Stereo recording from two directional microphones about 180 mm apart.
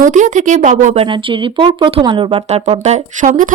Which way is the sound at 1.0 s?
25° right (ahead or behind).